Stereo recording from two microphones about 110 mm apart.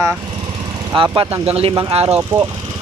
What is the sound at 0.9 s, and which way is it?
Speech, 55° right (ahead or behind).